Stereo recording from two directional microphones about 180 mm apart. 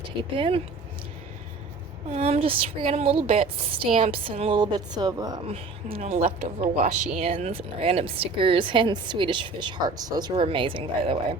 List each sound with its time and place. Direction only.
0.3 s speech: 30° right (ahead or behind)
2.0 s a woman's voice: 35° right (ahead or behind)
5.5 s a woman's voice: 35° right (ahead or behind)